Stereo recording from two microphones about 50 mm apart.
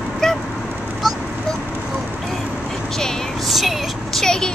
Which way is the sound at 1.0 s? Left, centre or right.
Centre.